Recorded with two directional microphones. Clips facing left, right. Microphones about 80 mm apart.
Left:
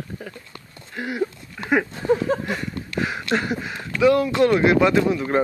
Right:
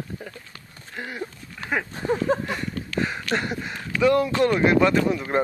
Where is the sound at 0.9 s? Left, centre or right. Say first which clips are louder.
Left 7 dB; centre.